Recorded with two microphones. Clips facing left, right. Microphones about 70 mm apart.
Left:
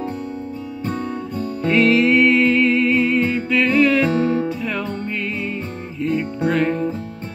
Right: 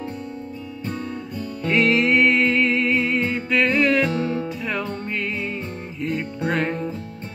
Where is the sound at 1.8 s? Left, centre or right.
Centre.